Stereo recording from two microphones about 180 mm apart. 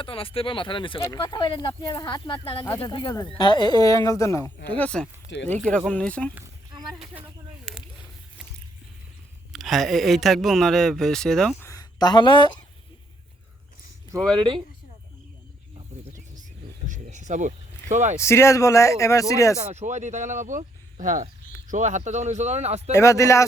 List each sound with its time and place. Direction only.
0.0 s speech: 30° left (ahead or behind); by 5.0 s 5° left (ahead or behind)
5.3 s speech: 85° left
5.6 s speech: 5° left (ahead or behind)
7.0 s speech: 10° right (ahead or behind)
9.5 s speech: centre (ahead or behind)
11.6 s speech: 20° left (ahead or behind)
16.0 s wild animals: 45° right (ahead or behind)
16.8 s a sound: 45° right (ahead or behind)
18.2 s speech: 15° left (ahead or behind)
19.5 s speech: 40° right (ahead or behind)
22.9 s speech: 15° left (ahead or behind)